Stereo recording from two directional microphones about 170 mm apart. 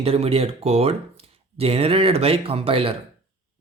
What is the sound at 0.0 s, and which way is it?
A man's voice, 35° right (ahead or behind).